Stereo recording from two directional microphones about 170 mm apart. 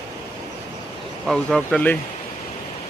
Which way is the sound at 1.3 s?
5° left (ahead or behind).